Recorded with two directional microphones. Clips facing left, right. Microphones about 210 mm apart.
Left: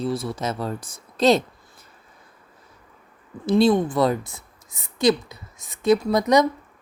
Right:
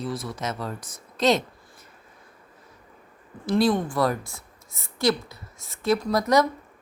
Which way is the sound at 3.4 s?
20° left (ahead or behind).